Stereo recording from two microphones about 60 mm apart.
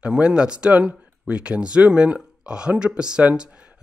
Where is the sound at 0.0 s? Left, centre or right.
Centre.